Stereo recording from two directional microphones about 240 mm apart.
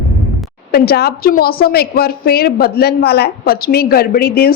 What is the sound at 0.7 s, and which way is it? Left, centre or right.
A woman's voice, left.